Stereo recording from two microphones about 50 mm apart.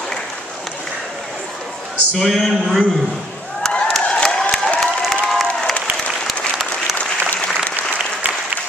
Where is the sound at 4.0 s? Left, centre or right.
Left.